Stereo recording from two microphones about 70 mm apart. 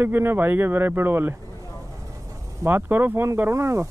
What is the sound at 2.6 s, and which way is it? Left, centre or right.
Speech, right.